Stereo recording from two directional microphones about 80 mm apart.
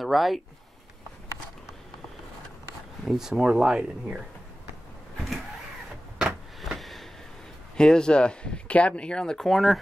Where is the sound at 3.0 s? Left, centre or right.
Centre.